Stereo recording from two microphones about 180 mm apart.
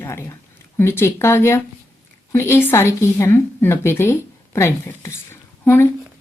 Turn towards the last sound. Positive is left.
turn(degrees=10)  # may be behind; listen again after turning